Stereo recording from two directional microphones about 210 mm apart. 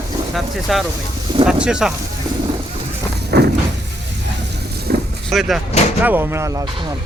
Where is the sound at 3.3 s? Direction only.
50° right (ahead or behind).